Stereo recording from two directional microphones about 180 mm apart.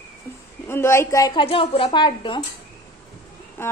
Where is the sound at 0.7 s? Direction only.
15° left (ahead or behind).